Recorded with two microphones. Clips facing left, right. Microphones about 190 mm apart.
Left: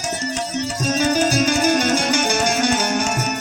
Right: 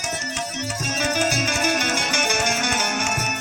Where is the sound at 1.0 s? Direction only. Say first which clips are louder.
Left 5 dB; 35° left (ahead or behind).